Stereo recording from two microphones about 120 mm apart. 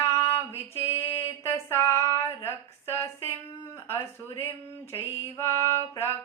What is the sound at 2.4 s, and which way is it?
Speech, 20° left (ahead or behind).